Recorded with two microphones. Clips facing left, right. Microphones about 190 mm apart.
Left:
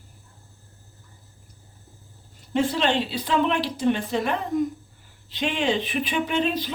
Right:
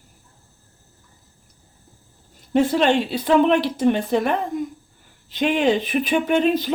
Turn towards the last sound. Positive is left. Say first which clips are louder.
# right 6 dB
turn(degrees=-50)  # may be behind; listen again after turning